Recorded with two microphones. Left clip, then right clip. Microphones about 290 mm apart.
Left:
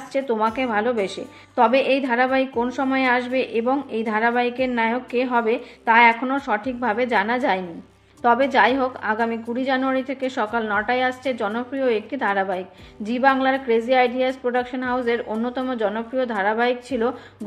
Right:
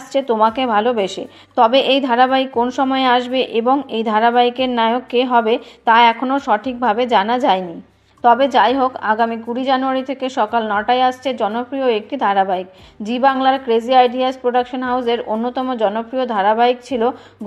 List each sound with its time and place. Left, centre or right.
0.1 s a woman's voice: centre